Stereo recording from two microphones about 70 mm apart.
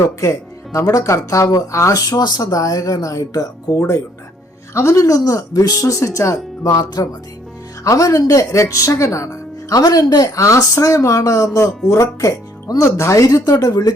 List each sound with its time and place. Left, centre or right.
0.0 s speech: left
3.8 s speech: left
13.0 s speech: left